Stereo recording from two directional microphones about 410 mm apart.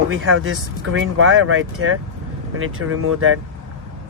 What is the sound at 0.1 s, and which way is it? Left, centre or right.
Speech, right.